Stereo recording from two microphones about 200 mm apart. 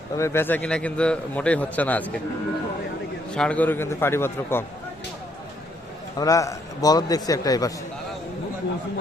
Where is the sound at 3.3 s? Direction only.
5° left (ahead or behind).